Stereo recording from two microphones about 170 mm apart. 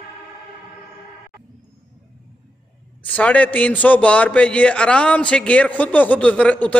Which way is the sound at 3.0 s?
10° left (ahead or behind).